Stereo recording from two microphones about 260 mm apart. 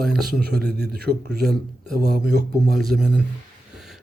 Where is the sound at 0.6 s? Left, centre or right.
Right.